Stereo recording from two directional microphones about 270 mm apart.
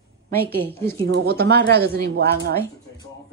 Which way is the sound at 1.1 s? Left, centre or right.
Right.